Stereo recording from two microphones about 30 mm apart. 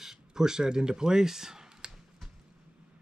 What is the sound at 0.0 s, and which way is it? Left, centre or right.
Speech, centre.